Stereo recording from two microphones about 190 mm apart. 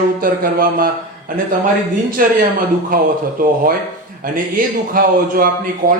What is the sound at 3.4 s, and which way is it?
Speech, 45° right (ahead or behind).